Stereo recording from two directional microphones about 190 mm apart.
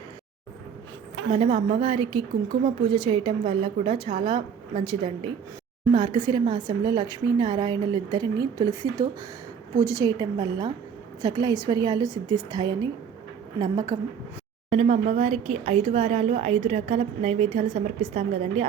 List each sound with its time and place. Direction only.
1.3 s speech: 30° right (ahead or behind)
14.7 s speech: 35° right (ahead or behind)